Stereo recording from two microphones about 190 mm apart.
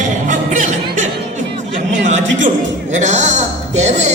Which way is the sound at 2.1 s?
40° right (ahead or behind).